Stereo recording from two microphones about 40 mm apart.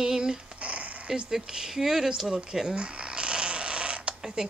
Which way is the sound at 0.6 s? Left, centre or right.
Right.